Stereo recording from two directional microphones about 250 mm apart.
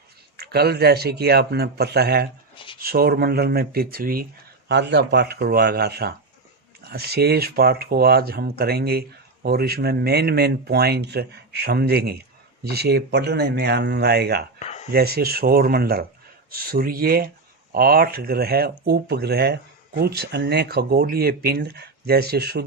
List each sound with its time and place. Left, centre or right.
0.3 s speech: right
14.6 s a sound: left
14.9 s speech: right